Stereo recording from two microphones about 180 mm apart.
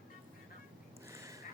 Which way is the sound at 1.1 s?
15° right (ahead or behind).